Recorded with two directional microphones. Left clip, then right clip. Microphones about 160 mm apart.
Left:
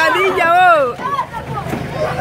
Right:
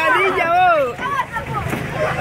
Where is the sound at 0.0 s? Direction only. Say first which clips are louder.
Left 3 dB; 15° left (ahead or behind).